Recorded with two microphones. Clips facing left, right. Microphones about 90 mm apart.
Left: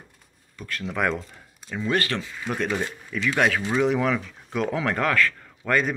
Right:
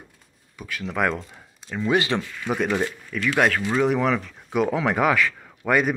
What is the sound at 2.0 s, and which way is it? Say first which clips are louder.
Speech: right 4 dB; 15° right (ahead or behind).